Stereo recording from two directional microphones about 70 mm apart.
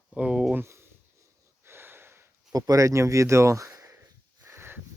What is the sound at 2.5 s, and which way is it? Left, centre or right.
Speech, right.